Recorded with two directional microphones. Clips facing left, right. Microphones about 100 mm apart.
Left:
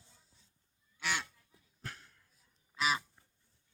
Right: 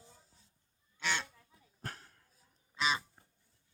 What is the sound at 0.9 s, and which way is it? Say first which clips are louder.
Goose: right 1 dB; 10° left (ahead or behind).